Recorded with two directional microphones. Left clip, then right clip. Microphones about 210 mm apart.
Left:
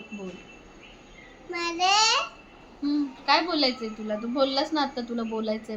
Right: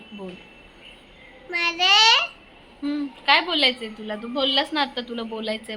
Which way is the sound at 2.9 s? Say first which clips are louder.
Right 4 dB; 25° right (ahead or behind).